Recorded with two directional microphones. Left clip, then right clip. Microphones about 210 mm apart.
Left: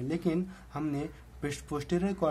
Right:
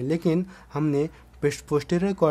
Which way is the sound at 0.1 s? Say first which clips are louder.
Right 7 dB; 40° right (ahead or behind).